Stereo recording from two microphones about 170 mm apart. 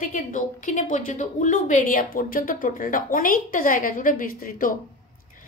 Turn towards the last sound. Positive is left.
turn(degrees=55)  # may be behind; listen again after turning